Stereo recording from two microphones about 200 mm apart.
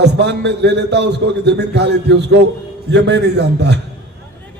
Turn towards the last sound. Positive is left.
turn(degrees=-55)  # may be behind; listen again after turning